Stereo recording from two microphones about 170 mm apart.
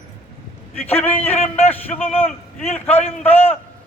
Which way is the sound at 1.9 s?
35° left (ahead or behind).